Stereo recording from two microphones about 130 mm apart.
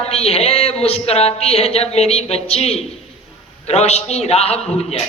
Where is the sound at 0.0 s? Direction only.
50° left (ahead or behind).